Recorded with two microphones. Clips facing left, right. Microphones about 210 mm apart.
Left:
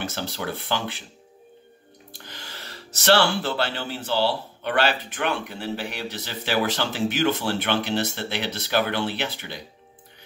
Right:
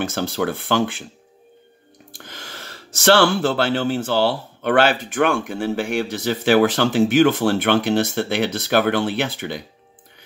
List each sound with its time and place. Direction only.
0.0 s speech: 50° right (ahead or behind)
2.1 s speech: 50° right (ahead or behind)